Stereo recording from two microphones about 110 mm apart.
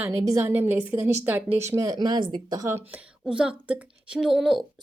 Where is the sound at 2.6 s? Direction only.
25° right (ahead or behind).